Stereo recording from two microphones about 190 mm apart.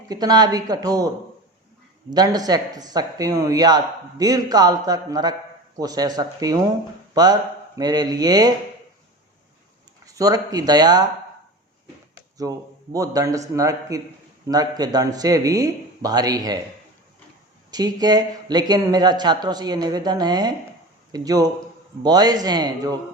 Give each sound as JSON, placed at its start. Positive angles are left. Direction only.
{"t": 0.1, "sound": "speech", "side_deg": -20}
{"t": 2.0, "sound": "speech", "side_deg": -20}
{"t": 10.1, "sound": "speech", "side_deg": -20}
{"t": 12.4, "sound": "a man's voice", "side_deg": -20}
{"t": 17.7, "sound": "speech", "side_deg": -20}